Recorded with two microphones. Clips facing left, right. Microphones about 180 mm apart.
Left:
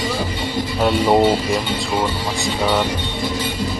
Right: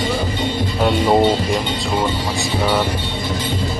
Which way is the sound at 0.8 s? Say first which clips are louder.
Even; centre (ahead or behind).